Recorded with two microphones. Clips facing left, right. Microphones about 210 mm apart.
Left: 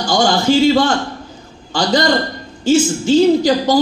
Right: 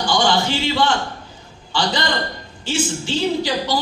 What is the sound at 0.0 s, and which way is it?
A man's voice, 45° left (ahead or behind).